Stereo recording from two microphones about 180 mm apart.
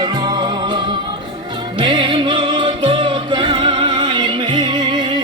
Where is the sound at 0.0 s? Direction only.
25° right (ahead or behind).